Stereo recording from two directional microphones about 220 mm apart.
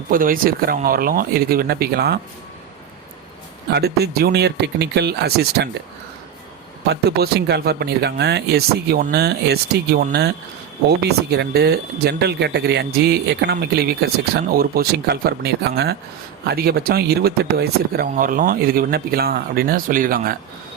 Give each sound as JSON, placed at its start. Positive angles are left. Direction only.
{"t": 0.1, "sound": "speech", "side_deg": -40}
{"t": 3.7, "sound": "speech", "side_deg": -45}
{"t": 6.8, "sound": "speech", "side_deg": -45}